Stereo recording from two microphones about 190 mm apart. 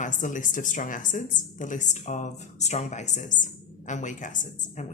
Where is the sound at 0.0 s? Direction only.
40° left (ahead or behind).